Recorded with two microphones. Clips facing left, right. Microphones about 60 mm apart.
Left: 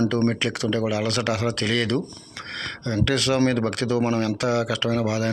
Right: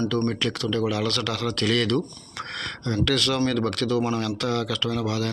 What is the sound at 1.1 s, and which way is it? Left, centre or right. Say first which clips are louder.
Speech: left 3 dB; centre.